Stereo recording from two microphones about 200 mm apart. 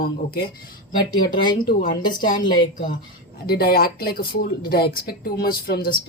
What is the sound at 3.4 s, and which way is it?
Speech, 50° left (ahead or behind).